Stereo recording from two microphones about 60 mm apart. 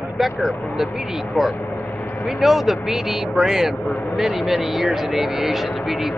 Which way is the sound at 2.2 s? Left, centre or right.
Centre.